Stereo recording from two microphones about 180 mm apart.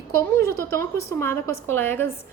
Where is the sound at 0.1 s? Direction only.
15° left (ahead or behind).